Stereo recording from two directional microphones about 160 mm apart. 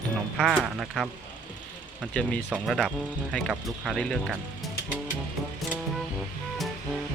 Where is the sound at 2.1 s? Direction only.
5° left (ahead or behind).